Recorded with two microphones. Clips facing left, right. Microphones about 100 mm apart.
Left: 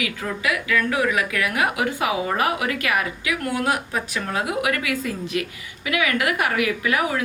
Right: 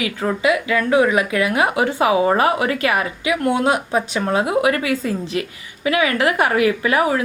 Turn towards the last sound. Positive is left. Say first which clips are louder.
# right 5 dB
turn(degrees=-30)  # may be behind; listen again after turning